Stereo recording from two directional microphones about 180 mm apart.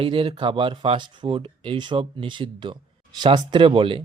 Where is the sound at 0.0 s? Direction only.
30° right (ahead or behind).